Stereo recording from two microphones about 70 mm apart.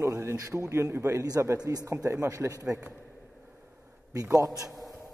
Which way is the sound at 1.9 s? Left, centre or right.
Right.